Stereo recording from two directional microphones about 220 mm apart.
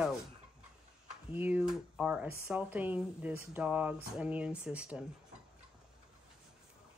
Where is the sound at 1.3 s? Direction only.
5° right (ahead or behind).